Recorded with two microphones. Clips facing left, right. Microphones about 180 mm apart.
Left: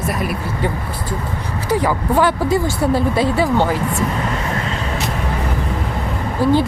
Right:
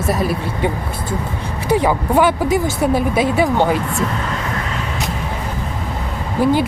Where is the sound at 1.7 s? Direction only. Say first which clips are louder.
Right 2 dB; 20° right (ahead or behind).